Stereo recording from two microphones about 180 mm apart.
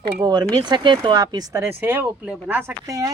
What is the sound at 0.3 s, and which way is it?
A woman's voice, 25° right (ahead or behind).